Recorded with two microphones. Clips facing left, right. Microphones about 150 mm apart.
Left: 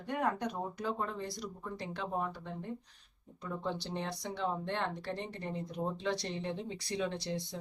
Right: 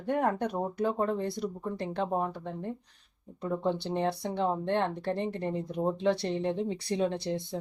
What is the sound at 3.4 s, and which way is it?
Speech, 45° right (ahead or behind).